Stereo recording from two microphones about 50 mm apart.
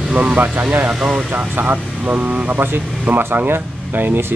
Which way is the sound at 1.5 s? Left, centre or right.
Right.